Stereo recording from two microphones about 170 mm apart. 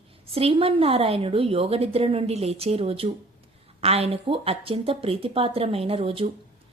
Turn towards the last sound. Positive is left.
turn(degrees=-35)  # may be behind; listen again after turning